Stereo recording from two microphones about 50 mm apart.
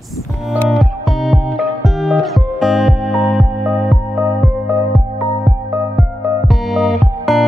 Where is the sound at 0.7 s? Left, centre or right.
Centre.